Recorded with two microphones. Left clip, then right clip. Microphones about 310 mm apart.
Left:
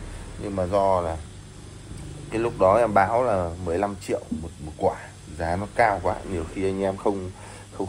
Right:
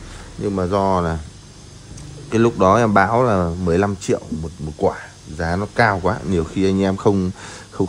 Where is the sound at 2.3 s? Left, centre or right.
Right.